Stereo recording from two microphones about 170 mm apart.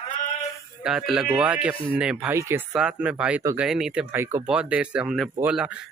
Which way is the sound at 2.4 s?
15° right (ahead or behind).